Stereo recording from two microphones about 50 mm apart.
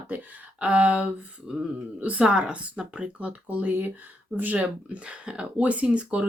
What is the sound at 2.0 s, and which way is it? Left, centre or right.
Speech, right.